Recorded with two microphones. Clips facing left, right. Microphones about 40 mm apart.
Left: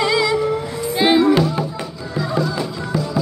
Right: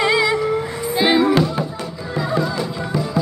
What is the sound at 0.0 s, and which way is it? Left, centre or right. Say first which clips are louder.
Music: right 1 dB; right.